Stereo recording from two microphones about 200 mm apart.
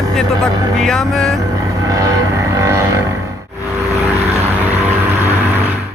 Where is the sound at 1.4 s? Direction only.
15° right (ahead or behind).